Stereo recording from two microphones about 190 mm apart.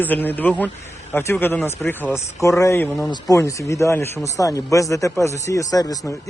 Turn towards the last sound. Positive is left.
turn(degrees=20)  # may be behind; listen again after turning